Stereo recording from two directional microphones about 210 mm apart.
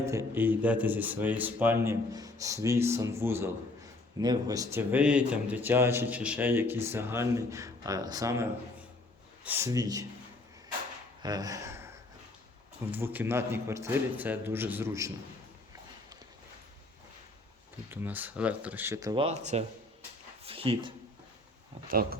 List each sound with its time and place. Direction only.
0.0 s speech: 15° right (ahead or behind)
11.2 s a sound: 20° right (ahead or behind)
12.8 s speech: 10° right (ahead or behind)
17.9 s speech: 10° right (ahead or behind); by 19.4 s 25° right (ahead or behind)
20.4 s a sound: 25° right (ahead or behind)
21.8 s speech: 45° right (ahead or behind)